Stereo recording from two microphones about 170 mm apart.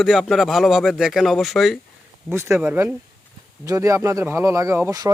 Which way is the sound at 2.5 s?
10° right (ahead or behind).